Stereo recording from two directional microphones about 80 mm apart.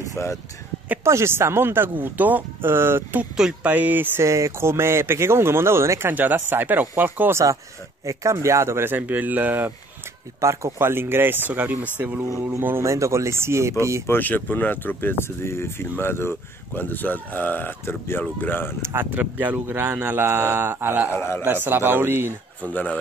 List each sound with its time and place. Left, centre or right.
0.1 s speech: left
1.0 s speech: right
3.3 s speech: centre
3.7 s speech: right
4.2 s speech: right
8.0 s speech: right
10.4 s speech: right
14.0 s speech: left
18.9 s speech: right
21.1 s speech: left
21.5 s speech: right
22.6 s speech: centre